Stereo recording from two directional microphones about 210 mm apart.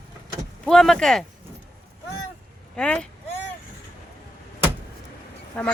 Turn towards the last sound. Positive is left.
turn(degrees=5)  # may be behind; listen again after turning